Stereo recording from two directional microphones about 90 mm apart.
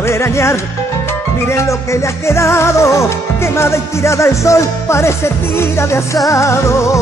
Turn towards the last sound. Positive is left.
turn(degrees=35)  # may be behind; listen again after turning